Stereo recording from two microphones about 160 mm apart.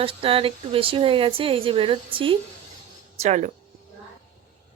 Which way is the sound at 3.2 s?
45° right (ahead or behind).